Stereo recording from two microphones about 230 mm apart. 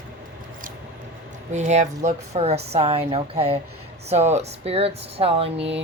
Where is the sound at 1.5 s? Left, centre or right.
Right.